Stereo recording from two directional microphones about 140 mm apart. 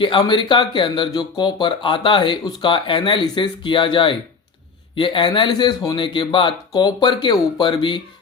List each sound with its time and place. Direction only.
0.0 s speech: 35° left (ahead or behind)